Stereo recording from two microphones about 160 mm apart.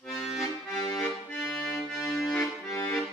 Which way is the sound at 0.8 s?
20° left (ahead or behind).